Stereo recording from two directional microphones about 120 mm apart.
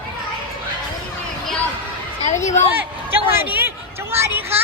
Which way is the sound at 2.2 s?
80° left.